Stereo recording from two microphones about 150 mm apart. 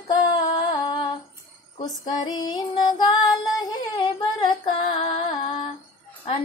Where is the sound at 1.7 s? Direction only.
30° left (ahead or behind).